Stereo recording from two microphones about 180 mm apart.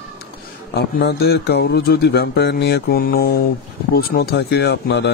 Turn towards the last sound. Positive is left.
turn(degrees=65)  # may be behind; listen again after turning